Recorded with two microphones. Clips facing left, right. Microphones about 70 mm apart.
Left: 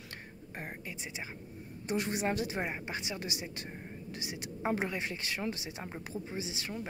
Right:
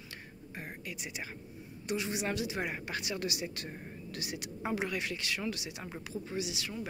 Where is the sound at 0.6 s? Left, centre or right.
Left.